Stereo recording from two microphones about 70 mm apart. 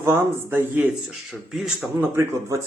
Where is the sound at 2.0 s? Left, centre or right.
Right.